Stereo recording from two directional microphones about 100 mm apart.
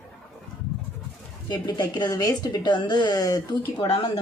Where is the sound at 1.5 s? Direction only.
45° left (ahead or behind).